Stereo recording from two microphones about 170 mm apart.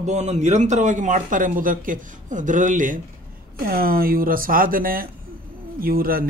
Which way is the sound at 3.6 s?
60° right (ahead or behind).